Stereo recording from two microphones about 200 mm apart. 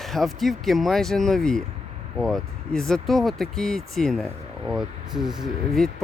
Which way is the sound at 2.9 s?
Centre (ahead or behind).